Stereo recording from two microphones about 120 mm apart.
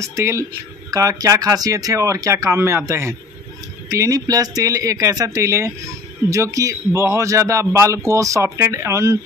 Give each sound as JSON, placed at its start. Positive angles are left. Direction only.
{"t": 0.0, "sound": "a man's voice", "side_deg": -25}